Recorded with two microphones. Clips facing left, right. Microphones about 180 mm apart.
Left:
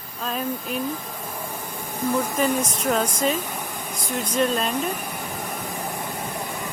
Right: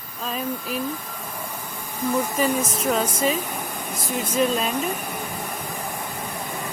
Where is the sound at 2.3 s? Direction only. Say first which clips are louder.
Even; centre (ahead or behind).